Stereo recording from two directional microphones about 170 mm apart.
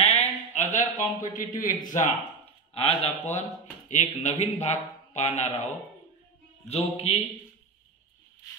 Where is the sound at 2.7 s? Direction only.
35° left (ahead or behind).